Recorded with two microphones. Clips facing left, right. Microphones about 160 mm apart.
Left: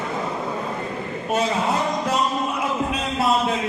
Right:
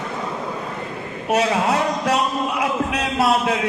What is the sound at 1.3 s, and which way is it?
Speech, 80° right.